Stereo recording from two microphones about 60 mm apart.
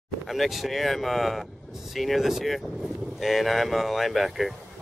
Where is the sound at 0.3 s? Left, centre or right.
Centre.